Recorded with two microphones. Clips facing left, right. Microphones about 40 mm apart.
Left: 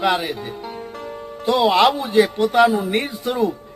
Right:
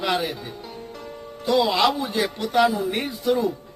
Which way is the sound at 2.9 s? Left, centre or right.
Left.